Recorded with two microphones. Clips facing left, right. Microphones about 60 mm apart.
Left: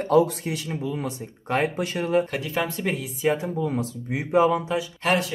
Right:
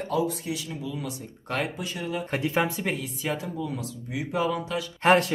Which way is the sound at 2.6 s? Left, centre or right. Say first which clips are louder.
Left 1 dB; centre.